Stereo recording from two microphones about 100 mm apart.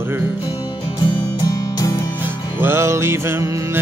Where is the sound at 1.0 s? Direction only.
45° left (ahead or behind).